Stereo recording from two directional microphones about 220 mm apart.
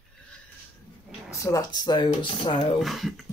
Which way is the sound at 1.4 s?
15° left (ahead or behind).